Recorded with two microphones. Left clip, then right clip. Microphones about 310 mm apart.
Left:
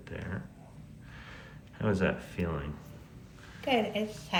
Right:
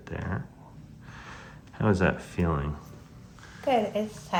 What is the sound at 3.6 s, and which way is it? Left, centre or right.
Speech, centre.